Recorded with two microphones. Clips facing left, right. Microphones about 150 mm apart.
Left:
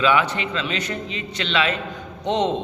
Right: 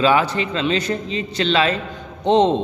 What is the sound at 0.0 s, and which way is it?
A man's voice, 35° right (ahead or behind).